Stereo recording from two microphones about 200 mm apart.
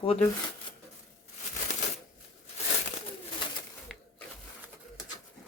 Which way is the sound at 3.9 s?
Centre (ahead or behind).